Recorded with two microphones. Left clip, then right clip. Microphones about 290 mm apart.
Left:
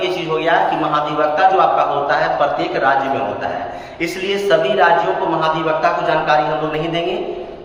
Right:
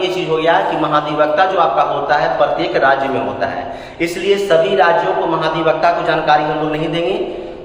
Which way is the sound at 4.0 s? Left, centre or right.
Centre.